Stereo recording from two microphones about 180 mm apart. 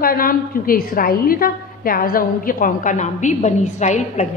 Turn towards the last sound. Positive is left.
turn(degrees=40)  # may be behind; listen again after turning